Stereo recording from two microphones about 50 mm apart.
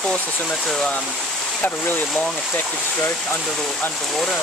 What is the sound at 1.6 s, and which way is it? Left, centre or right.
Speech, left.